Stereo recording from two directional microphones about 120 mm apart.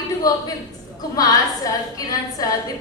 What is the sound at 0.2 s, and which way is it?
A woman's voice, 30° left (ahead or behind).